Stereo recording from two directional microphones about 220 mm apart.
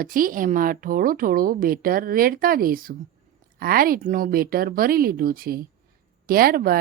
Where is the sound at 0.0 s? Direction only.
40° right (ahead or behind).